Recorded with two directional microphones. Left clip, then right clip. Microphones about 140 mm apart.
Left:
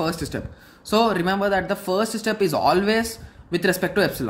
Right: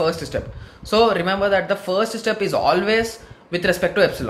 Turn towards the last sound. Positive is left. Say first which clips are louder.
# right 4 dB
turn(degrees=45)  # may be behind; listen again after turning